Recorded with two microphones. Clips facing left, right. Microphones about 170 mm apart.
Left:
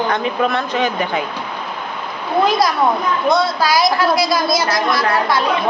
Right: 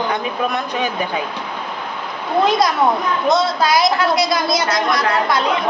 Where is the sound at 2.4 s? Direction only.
20° right (ahead or behind).